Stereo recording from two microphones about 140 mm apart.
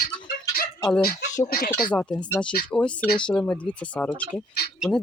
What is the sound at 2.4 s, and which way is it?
Speech, 15° left (ahead or behind).